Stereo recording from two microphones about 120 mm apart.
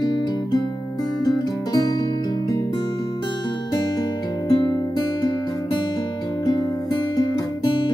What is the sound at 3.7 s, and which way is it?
Music, 40° left (ahead or behind).